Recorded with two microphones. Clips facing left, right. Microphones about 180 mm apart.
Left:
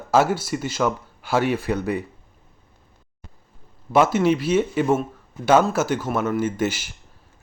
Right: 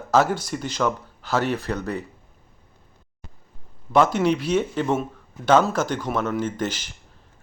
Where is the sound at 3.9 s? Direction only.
5° left (ahead or behind).